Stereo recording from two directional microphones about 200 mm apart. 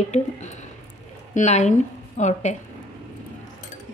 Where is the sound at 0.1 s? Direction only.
35° left (ahead or behind).